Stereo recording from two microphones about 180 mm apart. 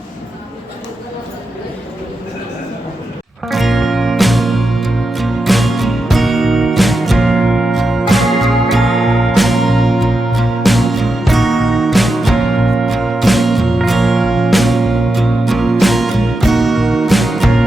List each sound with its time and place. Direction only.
3.5 s music: centre (ahead or behind)